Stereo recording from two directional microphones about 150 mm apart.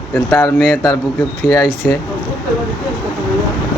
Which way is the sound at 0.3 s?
20° left (ahead or behind).